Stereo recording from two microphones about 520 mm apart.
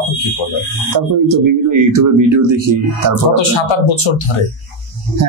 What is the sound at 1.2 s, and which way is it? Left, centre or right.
Speech, right.